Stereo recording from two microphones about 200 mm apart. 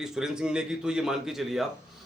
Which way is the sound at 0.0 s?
5° right (ahead or behind).